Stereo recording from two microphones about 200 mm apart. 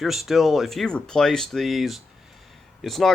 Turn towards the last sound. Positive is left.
turn(degrees=0)  # may be behind; listen again after turning